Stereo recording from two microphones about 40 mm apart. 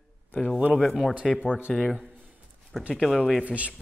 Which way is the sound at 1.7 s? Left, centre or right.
Centre.